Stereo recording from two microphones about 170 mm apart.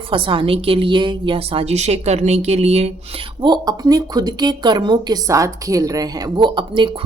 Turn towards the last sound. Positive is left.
turn(degrees=-30)  # may be behind; listen again after turning